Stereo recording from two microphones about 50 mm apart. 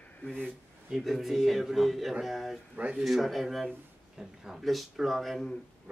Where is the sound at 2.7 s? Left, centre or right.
Right.